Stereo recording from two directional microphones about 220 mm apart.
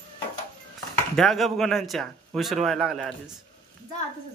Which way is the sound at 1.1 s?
Centre (ahead or behind).